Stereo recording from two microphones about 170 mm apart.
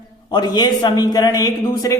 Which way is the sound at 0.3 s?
25° left (ahead or behind).